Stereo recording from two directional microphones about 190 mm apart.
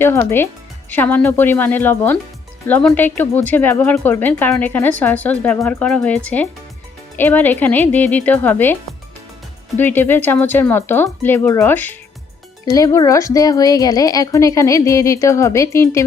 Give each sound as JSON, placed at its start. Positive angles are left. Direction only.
{"t": 0.0, "sound": "a woman's voice", "side_deg": 15}